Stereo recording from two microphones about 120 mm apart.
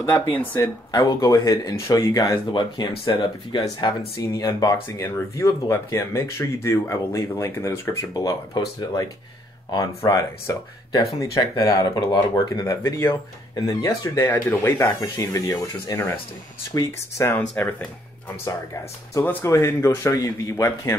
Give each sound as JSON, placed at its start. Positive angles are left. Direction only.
{"t": 0.4, "sound": "speech", "side_deg": 15}
{"t": 0.9, "sound": "speech", "side_deg": 30}
{"t": 2.5, "sound": "speech", "side_deg": 40}
{"t": 3.6, "sound": "speech", "side_deg": 30}
{"t": 14.1, "sound": "speech", "side_deg": 20}
{"t": 15.0, "sound": "speech", "side_deg": 30}
{"t": 17.3, "sound": "speech", "side_deg": 20}
{"t": 19.2, "sound": "speech", "side_deg": 20}